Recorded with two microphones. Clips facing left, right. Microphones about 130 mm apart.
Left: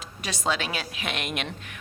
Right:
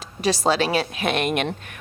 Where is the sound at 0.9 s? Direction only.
50° right (ahead or behind).